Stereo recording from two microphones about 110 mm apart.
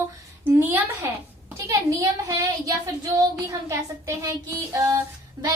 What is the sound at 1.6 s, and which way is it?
A woman's voice, 30° right (ahead or behind).